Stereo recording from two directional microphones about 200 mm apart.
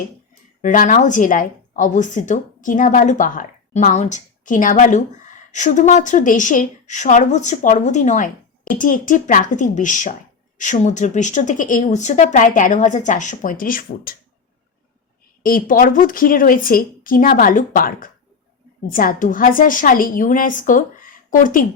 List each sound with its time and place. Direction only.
0.6 s speech: 40° left (ahead or behind)
15.4 s a woman's voice: 45° left (ahead or behind)